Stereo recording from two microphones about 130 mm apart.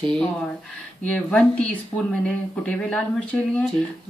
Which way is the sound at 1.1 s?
5° left (ahead or behind).